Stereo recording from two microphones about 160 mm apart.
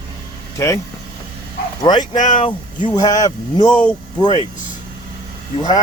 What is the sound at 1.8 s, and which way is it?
Speech, 25° left (ahead or behind).